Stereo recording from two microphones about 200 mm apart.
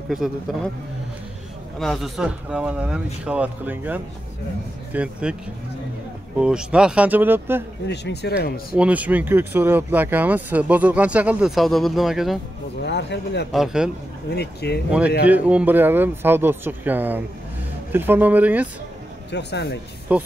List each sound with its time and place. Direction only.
0.1 s speech: centre (ahead or behind)
1.8 s speech: centre (ahead or behind)
6.4 s speech: 5° right (ahead or behind)
7.9 s speech: 55° left (ahead or behind)
8.7 s speech: 5° right (ahead or behind)
12.8 s speech: 60° left (ahead or behind)
13.5 s speech: centre (ahead or behind)
14.3 s speech: 55° left (ahead or behind)
14.9 s speech: 5° right (ahead or behind)
19.3 s speech: 55° left (ahead or behind)
20.1 s speech: 5° right (ahead or behind)